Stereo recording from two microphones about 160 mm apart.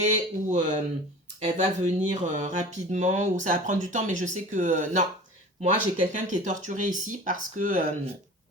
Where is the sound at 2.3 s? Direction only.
50° right (ahead or behind).